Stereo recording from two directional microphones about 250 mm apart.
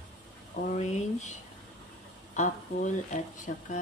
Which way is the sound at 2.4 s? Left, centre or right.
Left.